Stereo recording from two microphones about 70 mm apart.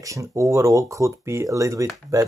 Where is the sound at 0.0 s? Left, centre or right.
Right.